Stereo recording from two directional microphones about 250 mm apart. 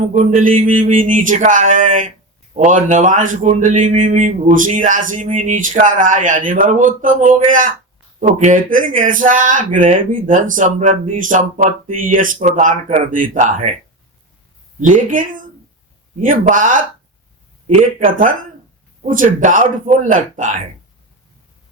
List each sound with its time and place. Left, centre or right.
0.1 s speech: right
14.8 s speech: right
18.0 s speech: right